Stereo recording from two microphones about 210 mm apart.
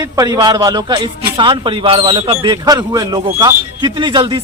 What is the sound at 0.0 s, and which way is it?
A man's voice, 20° right (ahead or behind).